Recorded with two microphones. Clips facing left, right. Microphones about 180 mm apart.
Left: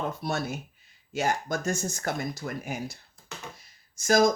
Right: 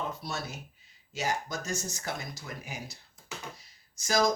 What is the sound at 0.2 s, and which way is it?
Speech, 55° left (ahead or behind).